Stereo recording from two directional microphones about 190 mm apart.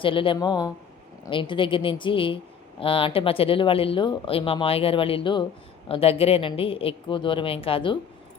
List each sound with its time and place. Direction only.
0.0 s a woman's voice: 25° left (ahead or behind)